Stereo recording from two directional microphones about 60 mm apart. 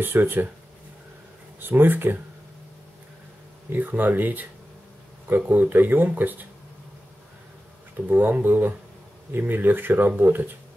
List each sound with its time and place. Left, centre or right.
0.0 s speech: right
1.6 s speech: right
3.7 s speech: right
5.5 s speech: right
8.1 s speech: right